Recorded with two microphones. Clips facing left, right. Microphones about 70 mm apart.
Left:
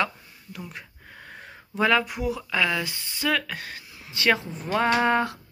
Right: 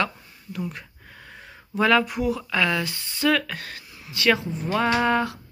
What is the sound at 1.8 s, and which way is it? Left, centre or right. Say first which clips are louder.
Speech: right 2 dB; centre.